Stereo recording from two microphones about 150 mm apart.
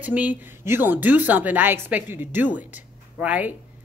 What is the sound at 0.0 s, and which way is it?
A woman's voice, 10° right (ahead or behind).